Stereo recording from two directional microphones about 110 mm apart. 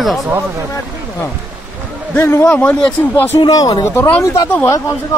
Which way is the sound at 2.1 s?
15° left (ahead or behind).